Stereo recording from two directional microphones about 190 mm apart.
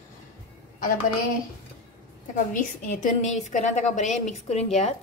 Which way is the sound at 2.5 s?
40° left (ahead or behind).